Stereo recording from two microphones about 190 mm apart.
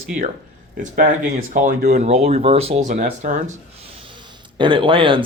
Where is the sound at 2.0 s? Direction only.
35° right (ahead or behind).